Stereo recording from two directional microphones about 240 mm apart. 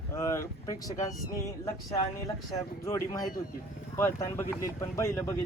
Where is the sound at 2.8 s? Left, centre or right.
Centre.